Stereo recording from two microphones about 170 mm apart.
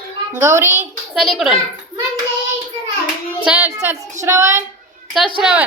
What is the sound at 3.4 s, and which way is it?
A woman's voice, 10° right (ahead or behind).